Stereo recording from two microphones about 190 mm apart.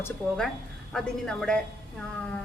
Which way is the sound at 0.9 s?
5° left (ahead or behind).